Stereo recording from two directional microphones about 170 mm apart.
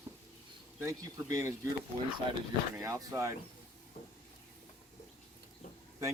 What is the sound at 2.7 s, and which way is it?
Speech, 20° right (ahead or behind).